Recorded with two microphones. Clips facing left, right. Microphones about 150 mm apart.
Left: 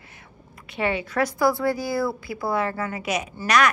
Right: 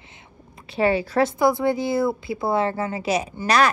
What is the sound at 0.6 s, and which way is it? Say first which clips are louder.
A woman's voice: right 5 dB; 35° right (ahead or behind).